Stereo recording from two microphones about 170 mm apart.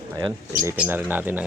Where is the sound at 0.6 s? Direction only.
10° right (ahead or behind).